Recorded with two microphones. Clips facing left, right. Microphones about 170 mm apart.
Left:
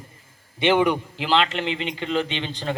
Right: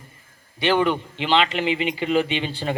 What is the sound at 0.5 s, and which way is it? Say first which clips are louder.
Speech: left 1 dB; 20° left (ahead or behind).